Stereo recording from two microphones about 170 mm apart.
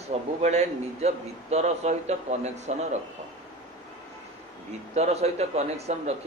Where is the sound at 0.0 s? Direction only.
40° right (ahead or behind).